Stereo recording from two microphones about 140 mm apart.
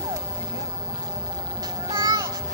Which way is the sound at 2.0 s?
30° right (ahead or behind).